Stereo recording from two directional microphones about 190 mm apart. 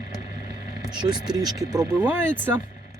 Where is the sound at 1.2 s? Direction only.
20° right (ahead or behind).